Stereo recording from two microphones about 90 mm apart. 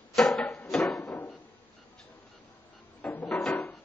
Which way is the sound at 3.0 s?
15° left (ahead or behind).